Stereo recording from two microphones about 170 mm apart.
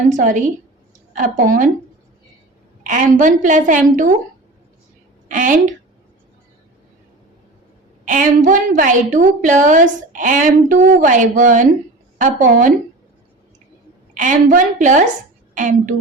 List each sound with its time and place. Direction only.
0.1 s a woman's voice: 50° right (ahead or behind)
2.8 s a woman's voice: 50° right (ahead or behind)
5.3 s a woman's voice: 50° right (ahead or behind)
8.0 s a woman's voice: 50° right (ahead or behind)
14.1 s a woman's voice: 50° right (ahead or behind)